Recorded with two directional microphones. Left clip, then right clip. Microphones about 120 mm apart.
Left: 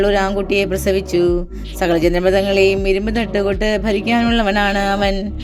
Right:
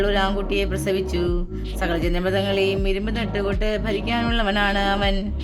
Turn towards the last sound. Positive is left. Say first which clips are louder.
# left 5 dB
turn(degrees=50)  # may be behind; listen again after turning